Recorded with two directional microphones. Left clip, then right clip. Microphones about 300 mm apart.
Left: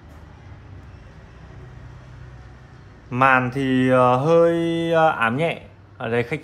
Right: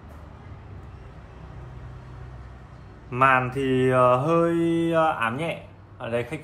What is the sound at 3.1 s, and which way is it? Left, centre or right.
Speech, left.